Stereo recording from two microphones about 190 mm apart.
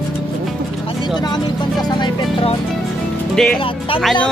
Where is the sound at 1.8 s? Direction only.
25° left (ahead or behind).